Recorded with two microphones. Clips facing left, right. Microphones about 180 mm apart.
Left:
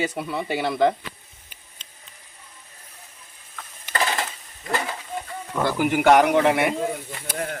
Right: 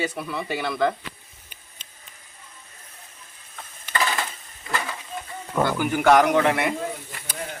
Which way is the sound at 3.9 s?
30° left (ahead or behind).